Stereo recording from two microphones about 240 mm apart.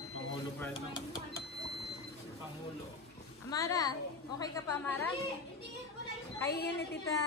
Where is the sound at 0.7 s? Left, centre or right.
Centre.